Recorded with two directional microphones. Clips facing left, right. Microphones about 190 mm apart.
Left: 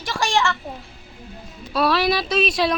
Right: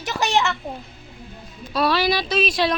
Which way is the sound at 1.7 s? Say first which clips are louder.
Left 1 dB; centre (ahead or behind).